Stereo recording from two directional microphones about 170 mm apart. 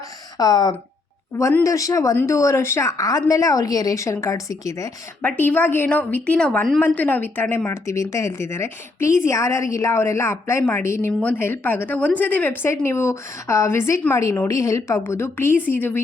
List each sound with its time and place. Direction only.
0.3 s a woman's voice: 20° left (ahead or behind)